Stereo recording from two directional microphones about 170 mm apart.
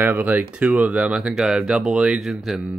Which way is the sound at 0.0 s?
10° right (ahead or behind).